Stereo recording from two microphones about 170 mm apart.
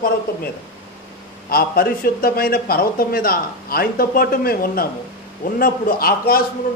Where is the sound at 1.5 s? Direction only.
60° left (ahead or behind).